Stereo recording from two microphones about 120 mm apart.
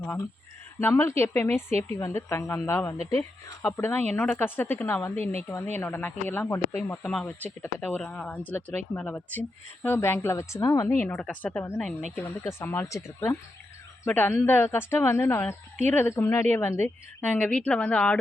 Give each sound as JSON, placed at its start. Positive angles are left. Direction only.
{"t": 0.8, "sound": "a woman's voice", "side_deg": 20}
{"t": 7.3, "sound": "a woman's voice", "side_deg": 15}
{"t": 11.9, "sound": "speech", "side_deg": 5}
{"t": 12.1, "sound": "a woman's voice", "side_deg": 20}